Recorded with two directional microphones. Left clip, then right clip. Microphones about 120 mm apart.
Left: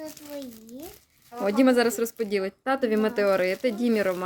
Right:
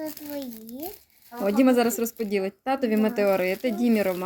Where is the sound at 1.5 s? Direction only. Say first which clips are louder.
Even; 35° left (ahead or behind).